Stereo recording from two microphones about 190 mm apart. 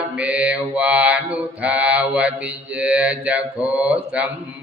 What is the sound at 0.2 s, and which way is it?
Mantra, 5° right (ahead or behind).